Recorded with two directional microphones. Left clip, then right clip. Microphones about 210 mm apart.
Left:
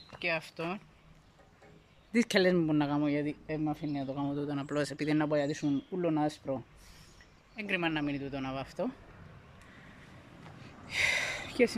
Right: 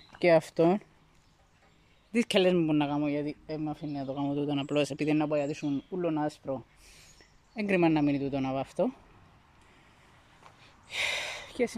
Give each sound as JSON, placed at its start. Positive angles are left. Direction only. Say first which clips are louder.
{"t": 0.2, "sound": "speech", "louder": "right 11 dB", "side_deg": -30}
{"t": 2.1, "sound": "a man's voice", "louder": "right 2 dB", "side_deg": -5}
{"t": 7.5, "sound": "speech", "louder": "right 6 dB", "side_deg": -25}
{"t": 10.6, "sound": "gasp", "louder": "left 2 dB", "side_deg": 0}